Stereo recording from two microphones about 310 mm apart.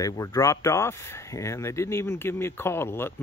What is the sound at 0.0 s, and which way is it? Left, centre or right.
Speech, centre.